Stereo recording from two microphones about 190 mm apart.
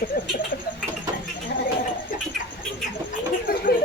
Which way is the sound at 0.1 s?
55° left (ahead or behind).